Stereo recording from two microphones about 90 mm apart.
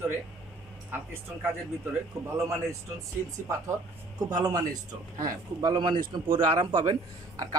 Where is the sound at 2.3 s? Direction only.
35° right (ahead or behind).